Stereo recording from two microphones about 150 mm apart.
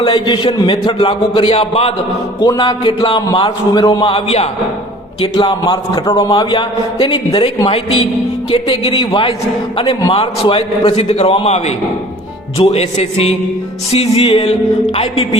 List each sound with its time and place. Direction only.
0.0 s a man's voice: 35° left (ahead or behind)
12.5 s music: 45° left (ahead or behind)
13.9 s a man's voice: 40° left (ahead or behind)